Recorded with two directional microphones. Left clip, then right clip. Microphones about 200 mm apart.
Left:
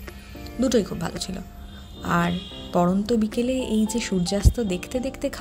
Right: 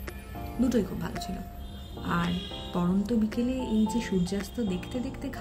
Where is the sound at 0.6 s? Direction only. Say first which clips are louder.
Left 6 dB; 40° left (ahead or behind).